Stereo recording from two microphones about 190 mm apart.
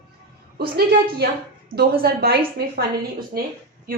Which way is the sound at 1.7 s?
55° right (ahead or behind).